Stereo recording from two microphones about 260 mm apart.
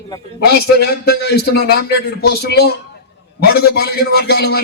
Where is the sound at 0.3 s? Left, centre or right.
Left.